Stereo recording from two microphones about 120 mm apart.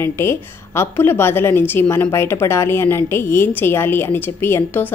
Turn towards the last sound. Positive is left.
turn(degrees=15)  # may be behind; listen again after turning